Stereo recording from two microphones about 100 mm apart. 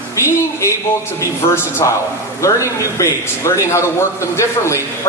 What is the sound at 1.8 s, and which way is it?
A man's voice, 35° left (ahead or behind).